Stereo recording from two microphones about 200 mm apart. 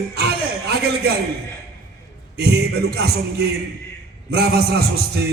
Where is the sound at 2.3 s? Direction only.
55° right (ahead or behind).